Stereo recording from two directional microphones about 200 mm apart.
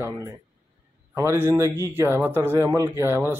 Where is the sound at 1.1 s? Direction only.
15° right (ahead or behind).